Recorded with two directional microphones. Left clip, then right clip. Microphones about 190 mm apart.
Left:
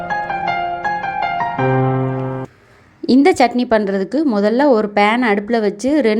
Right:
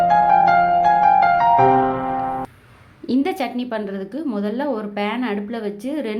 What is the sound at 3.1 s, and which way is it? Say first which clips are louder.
A woman's voice: left 10 dB; 35° left (ahead or behind).